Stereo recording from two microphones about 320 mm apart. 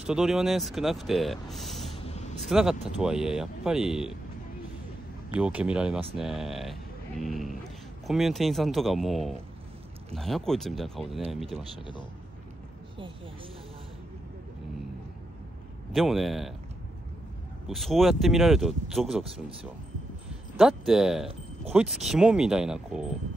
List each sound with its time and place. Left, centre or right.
0.0 s speech: centre
2.0 s a sound: centre
2.4 s speech: centre
5.3 s speech: centre
15.9 s speech: centre
17.6 s speech: centre
20.5 s speech: centre